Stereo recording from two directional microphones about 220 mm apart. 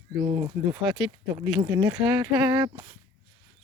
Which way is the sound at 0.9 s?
Centre (ahead or behind).